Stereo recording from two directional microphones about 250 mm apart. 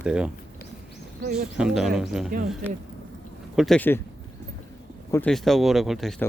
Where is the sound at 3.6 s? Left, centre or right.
Centre.